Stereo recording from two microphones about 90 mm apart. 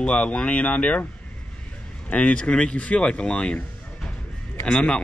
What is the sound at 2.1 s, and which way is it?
A man's voice, 15° left (ahead or behind).